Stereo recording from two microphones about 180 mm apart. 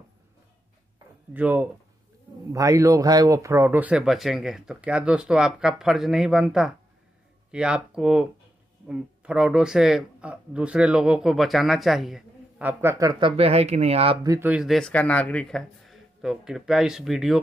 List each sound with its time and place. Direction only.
1.3 s speech: 10° right (ahead or behind)
13.4 s speech: 35° right (ahead or behind)
14.2 s speech: 15° right (ahead or behind)
14.5 s speech: centre (ahead or behind)